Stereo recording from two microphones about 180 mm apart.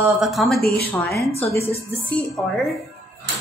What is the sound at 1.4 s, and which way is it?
Speech, 15° left (ahead or behind).